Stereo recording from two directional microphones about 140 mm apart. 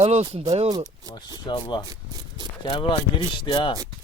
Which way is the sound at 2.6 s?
40° left (ahead or behind).